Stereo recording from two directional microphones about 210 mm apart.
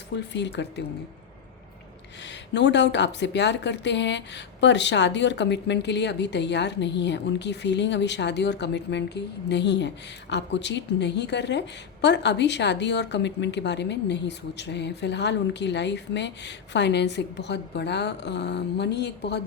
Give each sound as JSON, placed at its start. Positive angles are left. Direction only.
{"t": 0.3, "sound": "speech", "side_deg": 55}
{"t": 2.2, "sound": "speech", "side_deg": 55}